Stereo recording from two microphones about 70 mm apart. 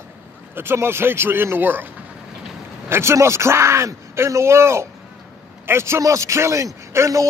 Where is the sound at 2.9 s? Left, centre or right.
Right.